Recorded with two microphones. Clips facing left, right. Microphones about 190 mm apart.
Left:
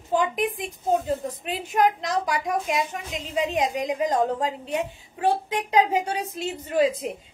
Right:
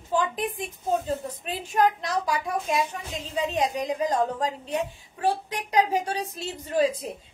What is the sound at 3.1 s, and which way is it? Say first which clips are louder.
A woman's voice: left 2 dB; 20° left (ahead or behind).